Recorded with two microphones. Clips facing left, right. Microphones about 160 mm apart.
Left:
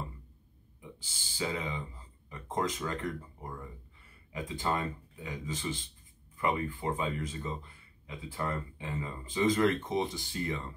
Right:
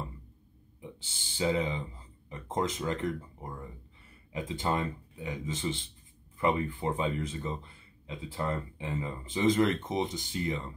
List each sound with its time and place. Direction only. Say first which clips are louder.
0.7 s speech: right 3 dB; 25° right (ahead or behind)
4.3 s speech: right 2 dB; 25° right (ahead or behind)